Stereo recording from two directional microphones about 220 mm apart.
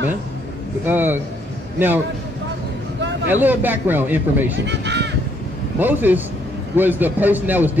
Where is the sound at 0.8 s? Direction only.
10° right (ahead or behind).